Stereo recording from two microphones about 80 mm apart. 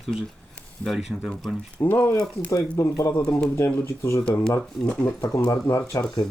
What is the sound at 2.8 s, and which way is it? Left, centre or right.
Speech, left.